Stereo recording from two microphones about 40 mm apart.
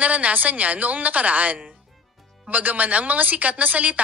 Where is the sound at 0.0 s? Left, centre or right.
Right.